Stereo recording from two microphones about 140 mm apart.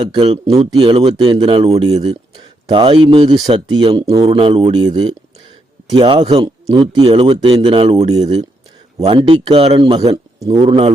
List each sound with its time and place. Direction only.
0.5 s a man's voice: 45° right (ahead or behind)
4.0 s speech: 25° right (ahead or behind)
4.3 s a man's voice: 45° right (ahead or behind)
7.0 s a man's voice: 45° right (ahead or behind)
10.1 s speech: 25° right (ahead or behind)
10.7 s speech: 40° right (ahead or behind)